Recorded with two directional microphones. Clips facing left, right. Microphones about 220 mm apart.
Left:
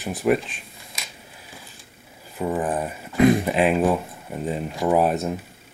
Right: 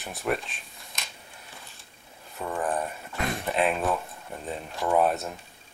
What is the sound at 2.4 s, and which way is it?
Speech, 15° left (ahead or behind).